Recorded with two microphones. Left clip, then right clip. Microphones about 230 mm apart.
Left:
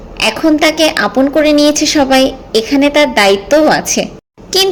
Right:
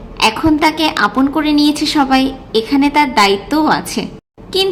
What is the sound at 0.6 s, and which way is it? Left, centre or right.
A woman's voice, right.